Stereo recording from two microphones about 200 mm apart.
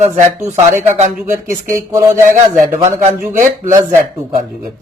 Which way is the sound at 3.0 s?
40° right (ahead or behind).